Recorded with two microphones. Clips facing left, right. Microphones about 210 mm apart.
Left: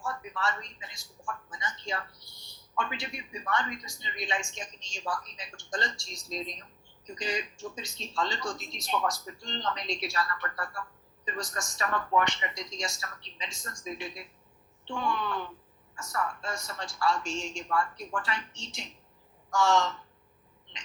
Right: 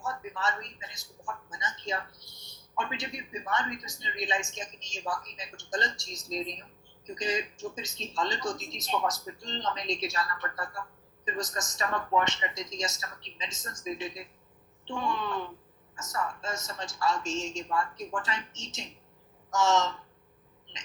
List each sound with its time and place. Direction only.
0.0 s a man's voice: 20° right (ahead or behind)